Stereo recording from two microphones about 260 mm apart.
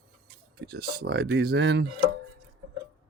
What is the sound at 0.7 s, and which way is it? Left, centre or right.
Speech, right.